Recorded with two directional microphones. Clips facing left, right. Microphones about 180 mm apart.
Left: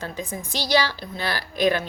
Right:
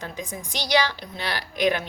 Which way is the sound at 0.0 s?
15° right (ahead or behind).